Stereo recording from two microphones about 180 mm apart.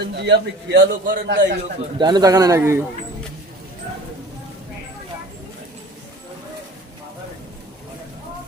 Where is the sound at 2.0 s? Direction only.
25° right (ahead or behind).